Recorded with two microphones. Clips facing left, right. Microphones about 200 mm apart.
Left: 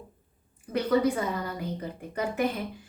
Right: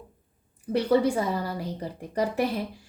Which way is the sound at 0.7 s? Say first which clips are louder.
Right 2 dB; 30° right (ahead or behind).